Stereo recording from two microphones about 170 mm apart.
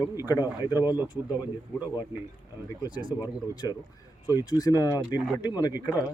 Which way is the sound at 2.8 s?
25° left (ahead or behind).